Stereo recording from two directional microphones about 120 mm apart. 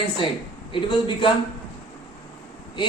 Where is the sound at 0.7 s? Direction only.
40° left (ahead or behind).